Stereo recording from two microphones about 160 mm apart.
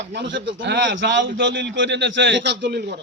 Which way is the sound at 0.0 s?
90° right.